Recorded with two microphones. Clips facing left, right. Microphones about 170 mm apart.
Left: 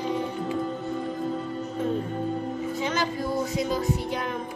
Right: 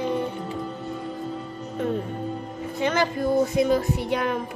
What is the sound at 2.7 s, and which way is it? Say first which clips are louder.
Music: right 7 dB; 60° right (ahead or behind).